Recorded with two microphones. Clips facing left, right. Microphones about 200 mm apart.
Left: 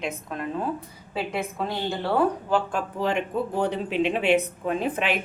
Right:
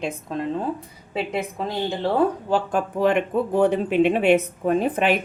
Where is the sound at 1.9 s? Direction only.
20° right (ahead or behind).